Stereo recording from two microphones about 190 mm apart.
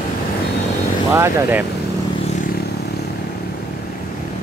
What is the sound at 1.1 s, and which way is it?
Speech, 15° right (ahead or behind).